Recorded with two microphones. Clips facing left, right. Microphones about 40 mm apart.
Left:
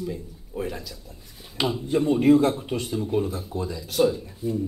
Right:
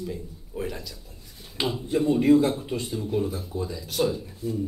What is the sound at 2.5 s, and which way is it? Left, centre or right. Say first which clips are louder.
Speech: left 2 dB; centre.